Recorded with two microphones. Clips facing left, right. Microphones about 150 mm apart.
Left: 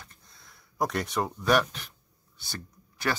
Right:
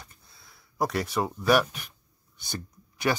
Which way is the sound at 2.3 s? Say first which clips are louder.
Right 4 dB; 15° right (ahead or behind).